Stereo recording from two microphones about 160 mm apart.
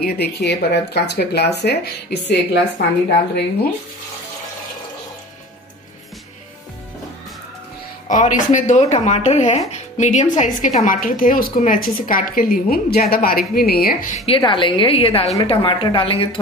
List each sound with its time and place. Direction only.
0.0 s speech: 85° left
8.1 s a woman's voice: 50° left (ahead or behind); by 14.1 s 75° left (ahead or behind)
14.1 s a woman's voice: 40° left (ahead or behind)